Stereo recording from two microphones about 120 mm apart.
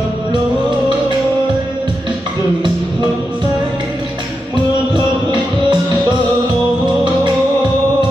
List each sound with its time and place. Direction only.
4.9 s music: 40° right (ahead or behind)